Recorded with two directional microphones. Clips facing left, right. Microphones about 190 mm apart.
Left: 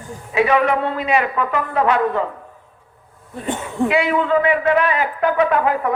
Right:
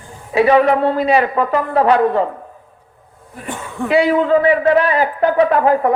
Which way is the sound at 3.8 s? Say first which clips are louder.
Right 4 dB; 35° right (ahead or behind).